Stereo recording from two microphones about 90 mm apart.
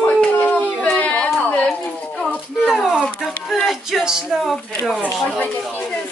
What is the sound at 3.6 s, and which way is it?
Speech, 5° right (ahead or behind).